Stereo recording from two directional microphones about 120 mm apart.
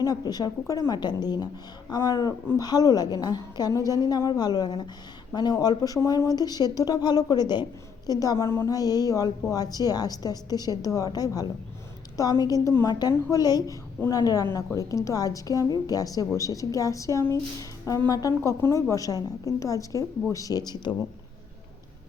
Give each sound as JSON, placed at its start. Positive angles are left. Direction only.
{"t": 0.0, "sound": "a woman's voice", "side_deg": 30}